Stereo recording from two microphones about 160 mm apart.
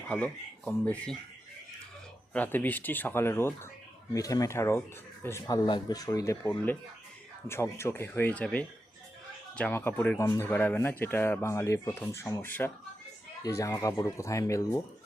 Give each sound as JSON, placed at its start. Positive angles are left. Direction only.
{"t": 0.1, "sound": "speech", "side_deg": 10}
{"t": 2.3, "sound": "speech", "side_deg": 10}